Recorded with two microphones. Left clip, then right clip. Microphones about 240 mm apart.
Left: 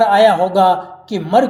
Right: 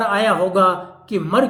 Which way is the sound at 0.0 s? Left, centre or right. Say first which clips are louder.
Left 6 dB; left.